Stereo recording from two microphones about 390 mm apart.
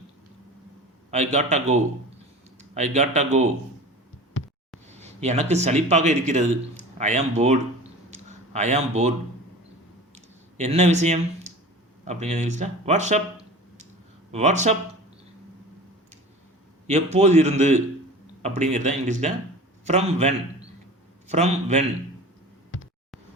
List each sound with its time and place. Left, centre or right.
1.1 s a man's voice: centre
2.6 s speech: centre
4.9 s a man's voice: centre
8.1 s a sound: centre
10.2 s a sound: centre
12.0 s a man's voice: centre
14.3 s a man's voice: centre
16.8 s a man's voice: centre